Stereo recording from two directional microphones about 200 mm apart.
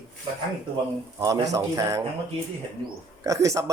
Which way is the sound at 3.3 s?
15° right (ahead or behind).